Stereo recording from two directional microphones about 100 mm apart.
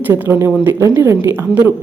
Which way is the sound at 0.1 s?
25° right (ahead or behind).